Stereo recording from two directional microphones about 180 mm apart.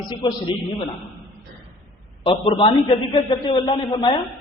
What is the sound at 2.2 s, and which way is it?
A man's voice, 30° left (ahead or behind).